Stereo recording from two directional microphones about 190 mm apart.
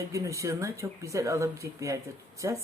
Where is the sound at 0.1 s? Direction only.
15° right (ahead or behind).